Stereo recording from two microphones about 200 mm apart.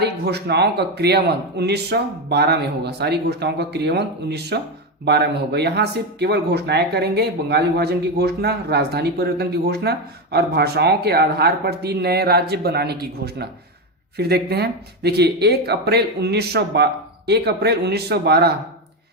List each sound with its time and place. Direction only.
0.0 s speech: 55° right (ahead or behind)